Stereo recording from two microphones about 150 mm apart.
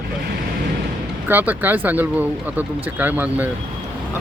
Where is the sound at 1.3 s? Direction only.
10° right (ahead or behind).